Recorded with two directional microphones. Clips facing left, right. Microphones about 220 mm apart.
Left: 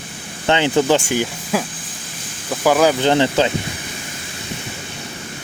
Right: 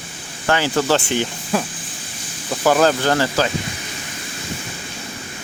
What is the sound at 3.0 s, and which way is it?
Speech, 20° left (ahead or behind).